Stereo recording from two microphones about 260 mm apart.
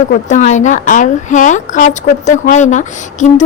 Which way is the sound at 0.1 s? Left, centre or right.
Left.